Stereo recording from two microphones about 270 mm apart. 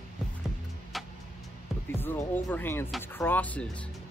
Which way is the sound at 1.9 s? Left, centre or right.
Centre.